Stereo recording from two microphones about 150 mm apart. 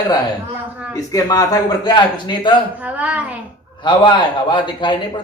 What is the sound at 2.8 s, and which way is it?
Speech, 10° right (ahead or behind).